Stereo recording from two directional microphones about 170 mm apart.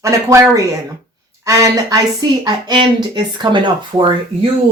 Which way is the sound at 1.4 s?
20° right (ahead or behind).